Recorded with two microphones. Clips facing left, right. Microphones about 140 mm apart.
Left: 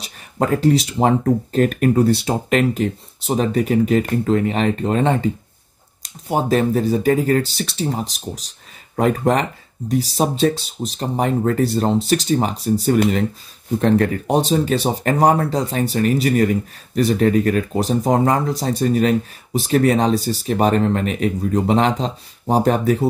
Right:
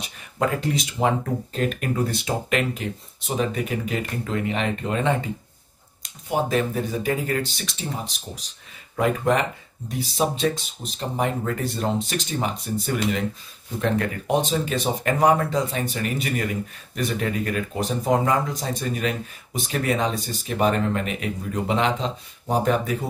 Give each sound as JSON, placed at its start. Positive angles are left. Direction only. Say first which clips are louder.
{"t": 0.0, "sound": "speech", "louder": "left 3 dB", "side_deg": 35}